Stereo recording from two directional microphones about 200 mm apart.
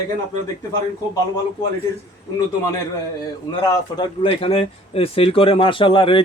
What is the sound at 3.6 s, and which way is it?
A man's voice, 20° left (ahead or behind).